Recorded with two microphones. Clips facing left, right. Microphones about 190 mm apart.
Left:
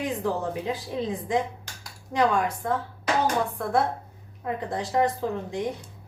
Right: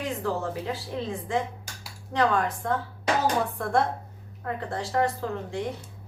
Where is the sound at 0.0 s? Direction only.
15° left (ahead or behind).